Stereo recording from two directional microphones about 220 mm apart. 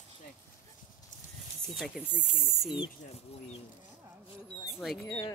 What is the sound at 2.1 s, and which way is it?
Speech, 40° left (ahead or behind).